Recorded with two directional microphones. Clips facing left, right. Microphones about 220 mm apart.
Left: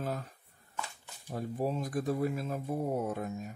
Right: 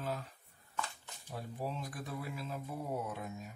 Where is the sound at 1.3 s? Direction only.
45° left (ahead or behind).